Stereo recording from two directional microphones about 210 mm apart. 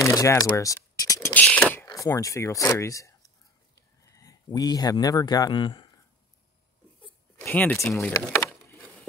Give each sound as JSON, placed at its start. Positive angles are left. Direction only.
{"t": 0.0, "sound": "speech", "side_deg": 15}
{"t": 7.3, "sound": "speech", "side_deg": 10}